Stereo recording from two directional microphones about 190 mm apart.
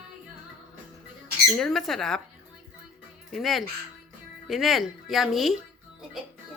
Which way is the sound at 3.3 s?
Centre (ahead or behind).